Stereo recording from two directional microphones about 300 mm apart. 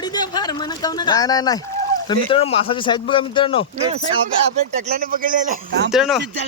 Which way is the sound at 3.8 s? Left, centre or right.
Centre.